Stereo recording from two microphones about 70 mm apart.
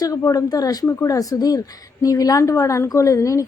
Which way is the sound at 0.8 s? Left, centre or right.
Left.